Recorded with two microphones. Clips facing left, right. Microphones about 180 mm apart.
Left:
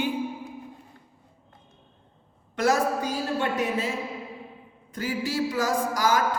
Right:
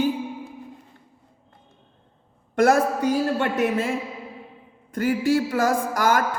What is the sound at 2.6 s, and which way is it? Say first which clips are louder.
A woman's voice: right 5 dB; 55° right (ahead or behind).